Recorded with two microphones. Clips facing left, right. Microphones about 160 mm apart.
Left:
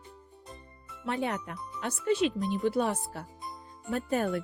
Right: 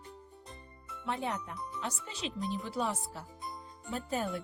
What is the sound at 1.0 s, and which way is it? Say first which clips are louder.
Speech: left 4 dB; 75° left (ahead or behind).